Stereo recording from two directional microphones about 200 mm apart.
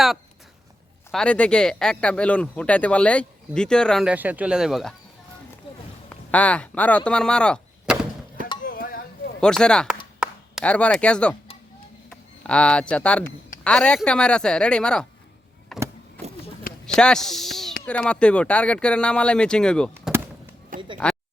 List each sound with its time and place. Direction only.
1.1 s speech: 5° left (ahead or behind)
6.1 s speech: 5° left (ahead or behind)
8.6 s a sound: 45° left (ahead or behind)
9.4 s speech: 5° left (ahead or behind)
10.2 s chop: 5° right (ahead or behind)
10.6 s speech: 5° left (ahead or behind)
15.7 s vehicle: centre (ahead or behind)
16.8 s speech: 5° left (ahead or behind)
19.9 s a sound: 10° right (ahead or behind)
20.7 s speech: 45° right (ahead or behind)